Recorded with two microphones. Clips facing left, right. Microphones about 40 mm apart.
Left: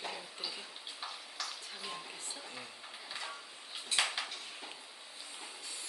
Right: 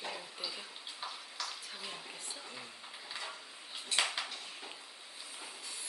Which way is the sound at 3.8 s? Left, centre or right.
Centre.